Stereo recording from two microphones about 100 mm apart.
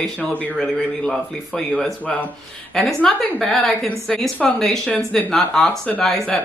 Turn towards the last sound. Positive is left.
turn(degrees=5)  # may be behind; listen again after turning